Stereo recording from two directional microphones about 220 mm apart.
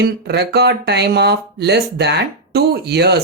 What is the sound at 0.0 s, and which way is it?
Speech, 50° right (ahead or behind).